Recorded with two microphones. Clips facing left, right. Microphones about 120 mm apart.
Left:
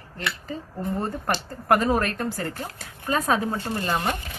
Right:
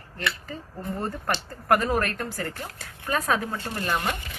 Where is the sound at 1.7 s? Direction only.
25° left (ahead or behind).